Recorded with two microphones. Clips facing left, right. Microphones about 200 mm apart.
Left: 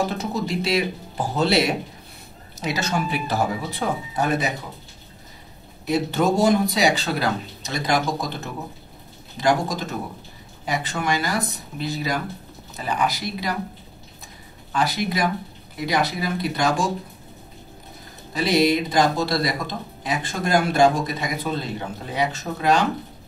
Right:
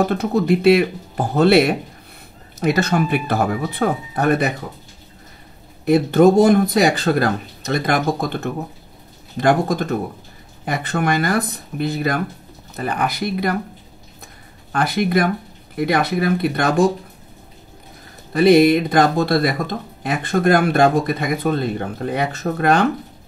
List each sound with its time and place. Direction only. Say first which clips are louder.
0.0 s speech: right 7 dB; 60° right (ahead or behind)
5.9 s speech: right 8 dB; 55° right (ahead or behind)
14.7 s speech: right 5 dB; 55° right (ahead or behind)
18.3 s speech: right 8 dB; 55° right (ahead or behind)